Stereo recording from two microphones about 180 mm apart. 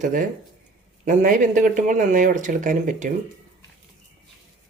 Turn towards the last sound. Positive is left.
turn(degrees=-45)  # may be behind; listen again after turning